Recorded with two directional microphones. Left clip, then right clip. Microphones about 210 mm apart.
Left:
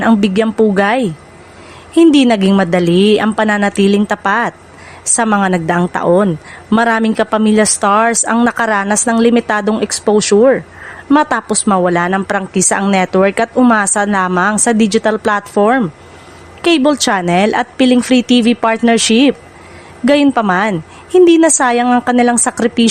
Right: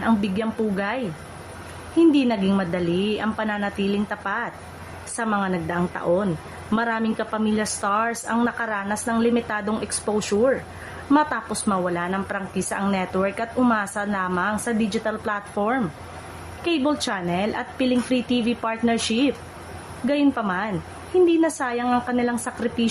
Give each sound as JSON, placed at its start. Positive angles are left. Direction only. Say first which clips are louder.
{"t": 0.0, "sound": "a woman's voice", "louder": "left 11 dB", "side_deg": 50}